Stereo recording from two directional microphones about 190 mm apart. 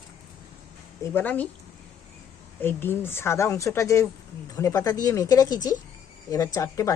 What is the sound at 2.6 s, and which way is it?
Speech, 10° left (ahead or behind).